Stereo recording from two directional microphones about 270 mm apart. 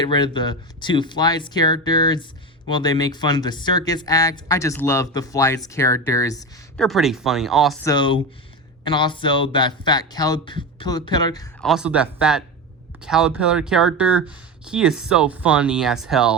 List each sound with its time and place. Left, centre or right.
0.0 s speech: centre
6.8 s speech: centre
7.9 s speech: centre
11.6 s speech: centre